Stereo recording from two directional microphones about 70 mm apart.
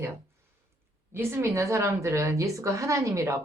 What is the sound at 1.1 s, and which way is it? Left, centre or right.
A woman's voice, right.